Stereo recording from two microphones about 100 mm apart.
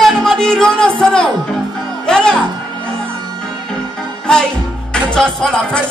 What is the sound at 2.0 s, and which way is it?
Speech, 5° left (ahead or behind).